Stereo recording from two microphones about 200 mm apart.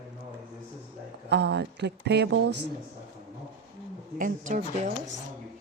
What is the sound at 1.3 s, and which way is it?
Speech, 55° right (ahead or behind).